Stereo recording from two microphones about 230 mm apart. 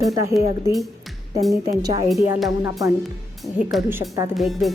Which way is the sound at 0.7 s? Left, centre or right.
Centre.